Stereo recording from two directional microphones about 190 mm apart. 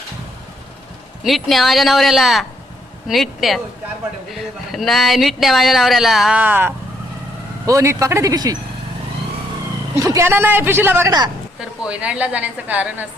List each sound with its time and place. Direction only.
1.2 s a woman's voice: centre (ahead or behind); by 8.5 s 20° right (ahead or behind)
10.0 s a woman's voice: 15° right (ahead or behind)
11.9 s a woman's voice: 5° right (ahead or behind)